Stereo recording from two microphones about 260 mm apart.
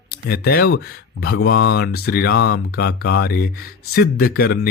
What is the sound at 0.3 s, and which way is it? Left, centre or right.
Speech, left.